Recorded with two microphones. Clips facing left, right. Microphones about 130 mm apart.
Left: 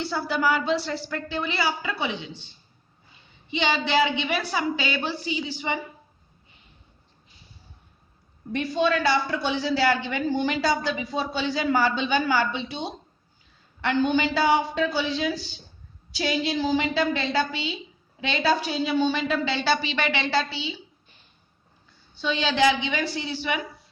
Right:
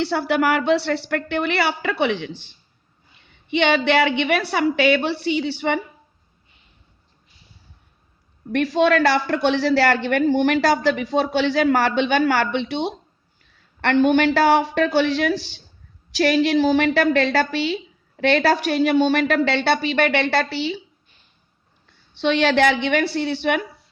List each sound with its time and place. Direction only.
0.0 s a woman's voice: 80° right
3.5 s a woman's voice: 65° right (ahead or behind)
8.5 s a man's voice: 90° right; by 20.8 s 70° right (ahead or behind)
22.1 s a woman's voice: 75° right (ahead or behind)